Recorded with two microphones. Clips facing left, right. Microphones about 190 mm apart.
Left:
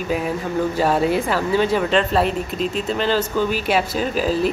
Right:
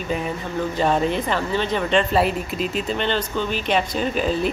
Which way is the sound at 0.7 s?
5° left (ahead or behind).